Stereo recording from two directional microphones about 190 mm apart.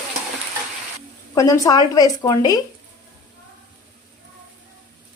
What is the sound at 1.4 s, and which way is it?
Speech, 15° left (ahead or behind).